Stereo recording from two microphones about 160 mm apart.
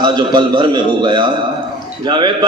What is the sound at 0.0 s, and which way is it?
A man's voice, 30° right (ahead or behind).